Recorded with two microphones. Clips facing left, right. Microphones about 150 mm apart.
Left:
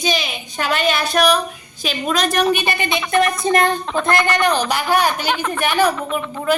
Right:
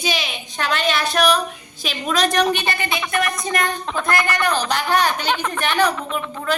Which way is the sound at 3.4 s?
30° left (ahead or behind).